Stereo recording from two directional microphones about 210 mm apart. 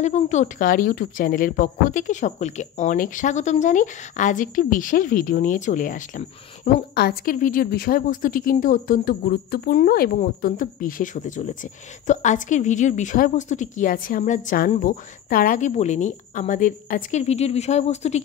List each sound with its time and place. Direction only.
0.0 s a woman's voice: 35° left (ahead or behind)